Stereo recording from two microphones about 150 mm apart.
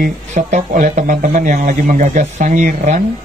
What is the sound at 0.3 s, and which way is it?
Speech, 50° right (ahead or behind).